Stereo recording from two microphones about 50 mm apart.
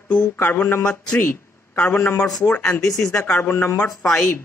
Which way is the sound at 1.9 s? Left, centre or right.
Left.